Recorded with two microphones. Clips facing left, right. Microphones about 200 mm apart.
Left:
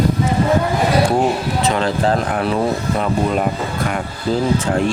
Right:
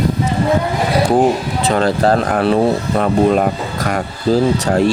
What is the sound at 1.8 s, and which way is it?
Speech, 40° right (ahead or behind).